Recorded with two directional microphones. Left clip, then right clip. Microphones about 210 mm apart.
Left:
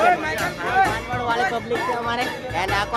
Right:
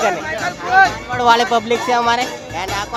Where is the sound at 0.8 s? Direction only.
35° right (ahead or behind).